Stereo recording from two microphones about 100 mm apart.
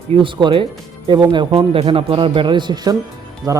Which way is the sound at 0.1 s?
55° right (ahead or behind).